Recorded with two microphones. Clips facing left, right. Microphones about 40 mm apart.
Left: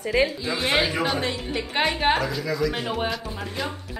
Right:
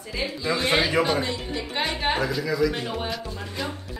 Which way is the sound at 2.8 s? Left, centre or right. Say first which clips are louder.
Left 3 dB; centre.